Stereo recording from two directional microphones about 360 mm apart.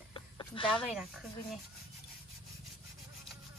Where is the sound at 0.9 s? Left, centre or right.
Centre.